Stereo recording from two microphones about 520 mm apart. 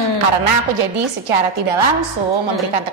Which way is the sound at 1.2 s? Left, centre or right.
Right.